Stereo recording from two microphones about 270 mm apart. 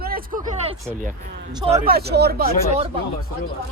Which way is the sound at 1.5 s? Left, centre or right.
Right.